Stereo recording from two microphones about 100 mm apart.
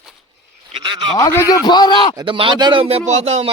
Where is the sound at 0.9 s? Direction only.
50° right (ahead or behind).